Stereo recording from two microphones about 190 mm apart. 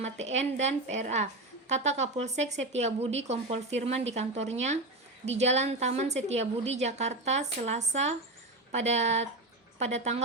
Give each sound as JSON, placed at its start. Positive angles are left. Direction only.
{"t": 0.0, "sound": "a woman's voice", "side_deg": -35}